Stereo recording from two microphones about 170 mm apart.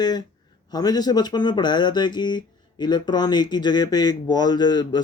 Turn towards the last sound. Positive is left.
turn(degrees=25)  # may be behind; listen again after turning